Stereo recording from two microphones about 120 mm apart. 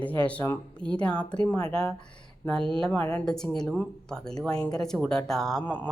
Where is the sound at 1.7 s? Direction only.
50° right (ahead or behind).